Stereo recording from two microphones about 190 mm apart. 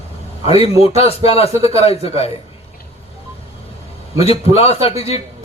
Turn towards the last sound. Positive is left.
turn(degrees=30)  # may be behind; listen again after turning